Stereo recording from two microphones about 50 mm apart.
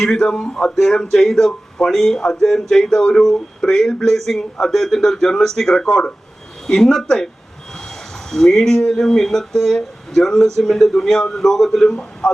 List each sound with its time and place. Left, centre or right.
0.0 s speech: centre
7.8 s a sound: centre
8.8 s speech: centre
11.9 s speech: centre